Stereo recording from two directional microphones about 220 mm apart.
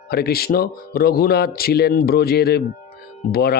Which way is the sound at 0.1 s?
45° left (ahead or behind).